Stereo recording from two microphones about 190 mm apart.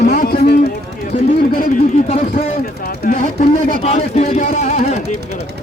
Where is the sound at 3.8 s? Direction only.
35° left (ahead or behind).